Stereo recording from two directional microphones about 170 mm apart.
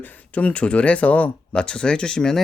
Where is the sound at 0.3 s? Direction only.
10° left (ahead or behind).